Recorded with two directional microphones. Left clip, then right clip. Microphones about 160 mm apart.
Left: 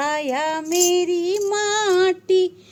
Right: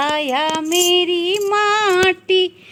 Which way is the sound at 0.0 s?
10° right (ahead or behind).